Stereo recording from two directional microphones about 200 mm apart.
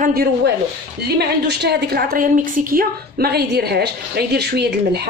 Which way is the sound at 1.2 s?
55° right (ahead or behind).